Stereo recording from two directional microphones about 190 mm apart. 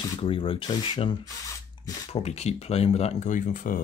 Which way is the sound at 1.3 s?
15° left (ahead or behind).